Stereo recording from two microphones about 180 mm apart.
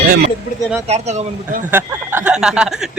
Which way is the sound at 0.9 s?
40° right (ahead or behind).